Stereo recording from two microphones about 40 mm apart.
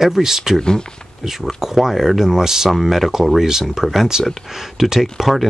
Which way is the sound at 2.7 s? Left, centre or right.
Centre.